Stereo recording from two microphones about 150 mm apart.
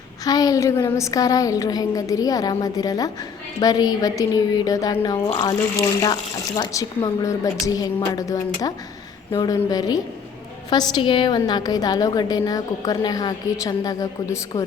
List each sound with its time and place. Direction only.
0.3 s a woman's voice: 25° left (ahead or behind)